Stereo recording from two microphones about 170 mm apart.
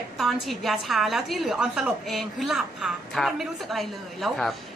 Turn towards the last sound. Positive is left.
turn(degrees=0)  # may be behind; listen again after turning